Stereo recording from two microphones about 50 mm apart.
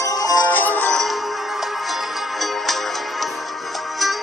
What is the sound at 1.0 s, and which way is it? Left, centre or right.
Music, centre.